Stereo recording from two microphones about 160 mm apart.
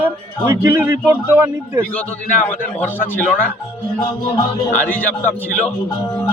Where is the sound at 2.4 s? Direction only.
10° left (ahead or behind).